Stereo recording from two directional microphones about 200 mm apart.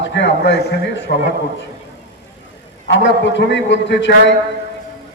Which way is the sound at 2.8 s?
65° left (ahead or behind).